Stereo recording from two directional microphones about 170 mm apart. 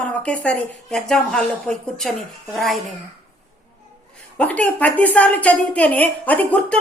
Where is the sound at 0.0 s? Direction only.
10° left (ahead or behind).